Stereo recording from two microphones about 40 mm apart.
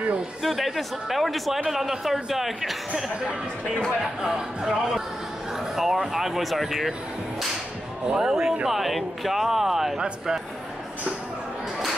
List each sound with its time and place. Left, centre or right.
0.4 s speech: centre
4.0 s speech: centre
8.0 s speech: centre